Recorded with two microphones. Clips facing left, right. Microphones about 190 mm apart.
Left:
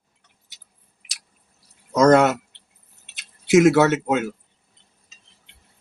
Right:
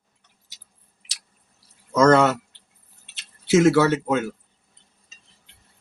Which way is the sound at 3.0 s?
15° left (ahead or behind).